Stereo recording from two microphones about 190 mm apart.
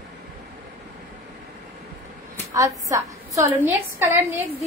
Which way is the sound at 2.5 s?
15° right (ahead or behind).